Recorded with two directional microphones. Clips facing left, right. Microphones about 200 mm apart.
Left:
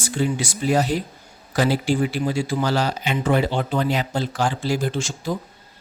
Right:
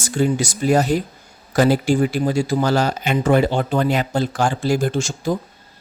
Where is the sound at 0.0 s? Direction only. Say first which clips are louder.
Right 4 dB; 45° right (ahead or behind).